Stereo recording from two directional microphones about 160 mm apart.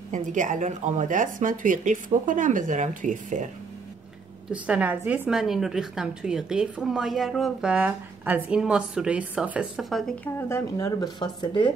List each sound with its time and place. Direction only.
0.1 s speech: 50° right (ahead or behind)
4.5 s a woman's voice: 5° right (ahead or behind)
10.5 s speech: 25° left (ahead or behind)